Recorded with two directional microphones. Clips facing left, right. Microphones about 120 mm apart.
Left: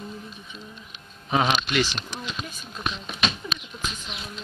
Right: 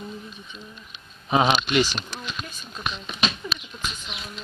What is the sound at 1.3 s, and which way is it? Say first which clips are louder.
Speech: right 3 dB; 20° right (ahead or behind).